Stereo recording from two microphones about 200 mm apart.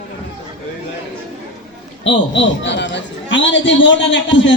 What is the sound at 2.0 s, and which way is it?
A man's voice, 65° left (ahead or behind).